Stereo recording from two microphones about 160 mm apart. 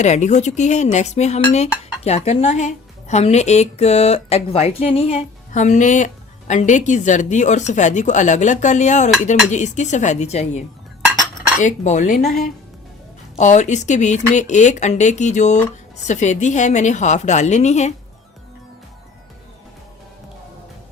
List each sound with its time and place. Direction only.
0.0 s speech: 45° left (ahead or behind)
5.5 s speech: 50° left (ahead or behind)
11.6 s speech: 50° left (ahead or behind)
13.3 s speech: 50° left (ahead or behind)